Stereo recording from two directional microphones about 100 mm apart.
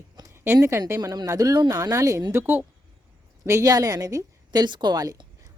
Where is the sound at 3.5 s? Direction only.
35° right (ahead or behind).